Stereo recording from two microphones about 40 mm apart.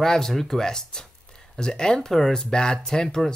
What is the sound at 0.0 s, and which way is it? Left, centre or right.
Speech, centre.